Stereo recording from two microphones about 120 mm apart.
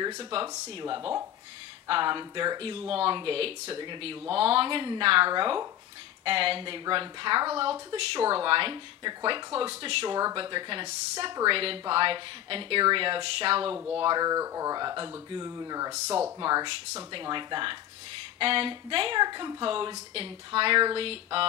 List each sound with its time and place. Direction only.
0.0 s speech: 35° right (ahead or behind)
2.9 s speech: 50° right (ahead or behind)
13.7 s speech: 20° right (ahead or behind)
14.0 s speech: 35° right (ahead or behind)
16.3 s speech: 35° right (ahead or behind); by 21.5 s 50° right (ahead or behind)